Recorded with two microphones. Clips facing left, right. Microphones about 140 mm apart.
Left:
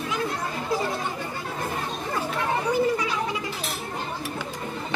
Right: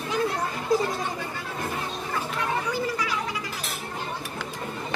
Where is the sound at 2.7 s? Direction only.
25° left (ahead or behind).